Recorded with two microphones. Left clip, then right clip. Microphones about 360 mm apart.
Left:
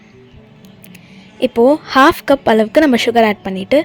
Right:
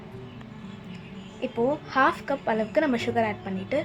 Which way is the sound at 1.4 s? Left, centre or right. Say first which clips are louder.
Left 15 dB; left.